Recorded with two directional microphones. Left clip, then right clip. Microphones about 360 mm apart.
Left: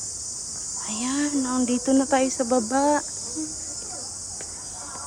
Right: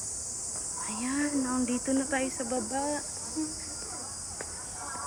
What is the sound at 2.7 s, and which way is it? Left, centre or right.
Speech, left.